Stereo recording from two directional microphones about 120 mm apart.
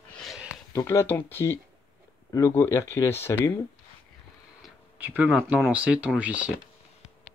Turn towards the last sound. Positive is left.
turn(degrees=-10)  # may be behind; listen again after turning